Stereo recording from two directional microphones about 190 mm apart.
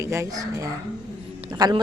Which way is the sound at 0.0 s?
15° right (ahead or behind).